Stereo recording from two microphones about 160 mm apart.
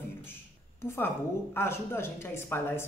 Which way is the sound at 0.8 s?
15° left (ahead or behind).